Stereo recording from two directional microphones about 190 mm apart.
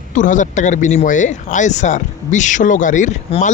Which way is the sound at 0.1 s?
40° left (ahead or behind).